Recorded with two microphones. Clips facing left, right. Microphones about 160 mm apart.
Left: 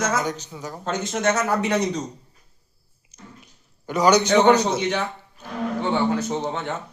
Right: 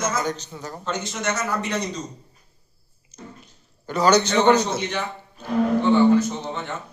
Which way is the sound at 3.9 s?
15° left (ahead or behind).